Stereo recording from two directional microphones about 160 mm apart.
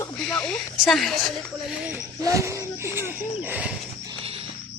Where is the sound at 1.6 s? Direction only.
10° right (ahead or behind).